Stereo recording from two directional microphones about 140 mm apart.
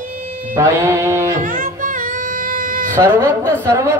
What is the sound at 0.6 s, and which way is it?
Speech, 20° right (ahead or behind).